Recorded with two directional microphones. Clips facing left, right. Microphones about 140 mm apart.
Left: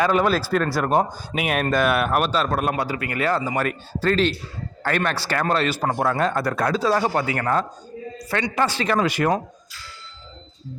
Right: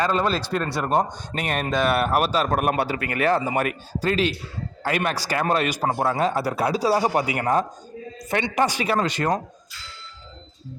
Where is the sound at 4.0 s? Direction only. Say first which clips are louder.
Left 2 dB; 10° right (ahead or behind).